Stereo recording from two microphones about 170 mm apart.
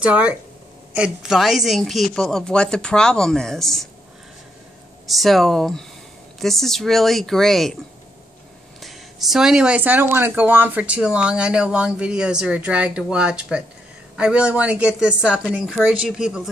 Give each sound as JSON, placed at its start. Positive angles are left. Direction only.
{"t": 0.0, "sound": "speech", "side_deg": -5}
{"t": 5.0, "sound": "speech", "side_deg": 0}
{"t": 8.8, "sound": "speech", "side_deg": 0}